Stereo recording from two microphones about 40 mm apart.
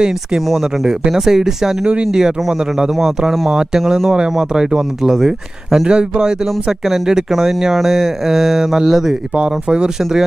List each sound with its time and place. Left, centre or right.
0.8 s speech: centre
3.2 s speech: centre
5.9 s speech: right
6.9 s speech: centre
9.4 s speech: right